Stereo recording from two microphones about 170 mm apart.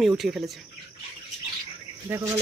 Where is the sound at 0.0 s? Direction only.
Centre (ahead or behind).